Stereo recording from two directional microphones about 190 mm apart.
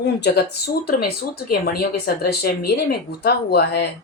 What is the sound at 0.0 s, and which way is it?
Speech, 60° left (ahead or behind).